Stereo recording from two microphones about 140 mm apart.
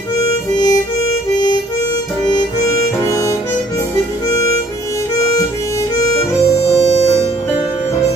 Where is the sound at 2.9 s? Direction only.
25° left (ahead or behind).